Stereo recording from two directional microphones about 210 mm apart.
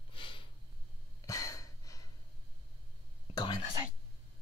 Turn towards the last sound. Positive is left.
turn(degrees=20)  # may be behind; listen again after turning